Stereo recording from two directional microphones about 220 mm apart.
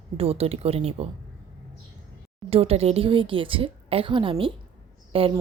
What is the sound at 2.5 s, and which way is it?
Speech, 25° right (ahead or behind).